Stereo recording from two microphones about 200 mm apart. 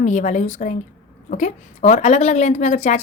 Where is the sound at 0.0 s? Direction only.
35° left (ahead or behind).